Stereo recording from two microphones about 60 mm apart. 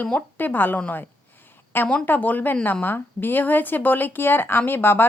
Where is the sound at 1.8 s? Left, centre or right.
Left.